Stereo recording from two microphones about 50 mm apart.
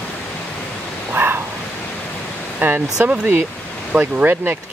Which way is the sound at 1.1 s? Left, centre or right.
Right.